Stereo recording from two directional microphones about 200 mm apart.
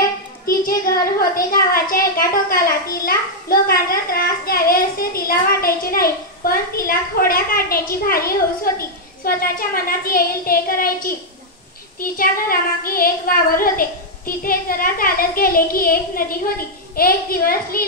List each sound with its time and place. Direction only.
0.5 s a child's voice: 45° left (ahead or behind)